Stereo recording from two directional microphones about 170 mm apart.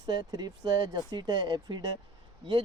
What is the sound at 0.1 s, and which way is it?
Speech, 25° right (ahead or behind).